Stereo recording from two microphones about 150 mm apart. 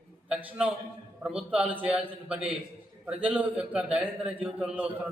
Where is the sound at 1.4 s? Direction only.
5° right (ahead or behind).